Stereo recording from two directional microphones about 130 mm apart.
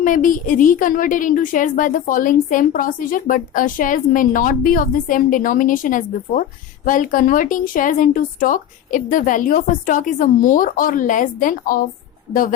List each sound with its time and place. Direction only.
0.0 s a woman's voice: 90° left